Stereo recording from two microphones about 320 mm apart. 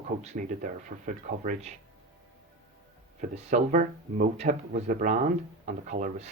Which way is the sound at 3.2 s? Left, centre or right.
Right.